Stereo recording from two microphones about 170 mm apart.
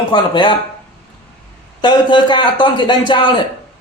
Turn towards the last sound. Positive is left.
turn(degrees=30)  # may be behind; listen again after turning